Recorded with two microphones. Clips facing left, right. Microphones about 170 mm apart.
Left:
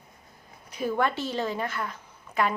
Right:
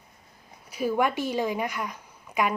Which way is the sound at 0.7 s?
10° right (ahead or behind).